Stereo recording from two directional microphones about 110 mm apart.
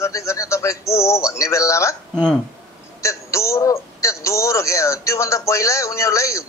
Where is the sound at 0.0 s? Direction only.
25° left (ahead or behind).